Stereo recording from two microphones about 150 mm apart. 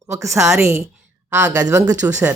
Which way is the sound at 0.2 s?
5° right (ahead or behind).